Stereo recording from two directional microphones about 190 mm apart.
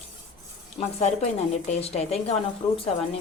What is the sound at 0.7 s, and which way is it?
A woman's voice, 35° left (ahead or behind).